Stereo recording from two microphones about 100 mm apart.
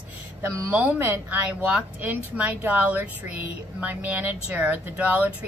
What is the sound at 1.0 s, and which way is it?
A woman's voice, 20° right (ahead or behind).